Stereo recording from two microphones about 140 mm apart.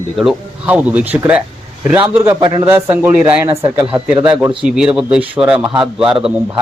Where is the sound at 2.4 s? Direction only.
35° right (ahead or behind).